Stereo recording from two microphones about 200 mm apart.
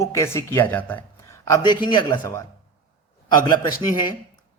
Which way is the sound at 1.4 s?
20° left (ahead or behind).